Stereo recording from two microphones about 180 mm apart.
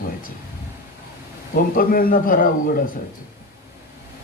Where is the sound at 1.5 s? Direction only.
50° left (ahead or behind).